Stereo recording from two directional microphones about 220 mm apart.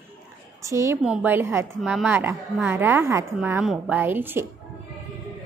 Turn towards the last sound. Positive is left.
turn(degrees=-10)  # may be behind; listen again after turning